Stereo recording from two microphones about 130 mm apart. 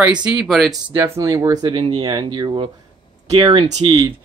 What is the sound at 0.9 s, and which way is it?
Speech, 20° right (ahead or behind).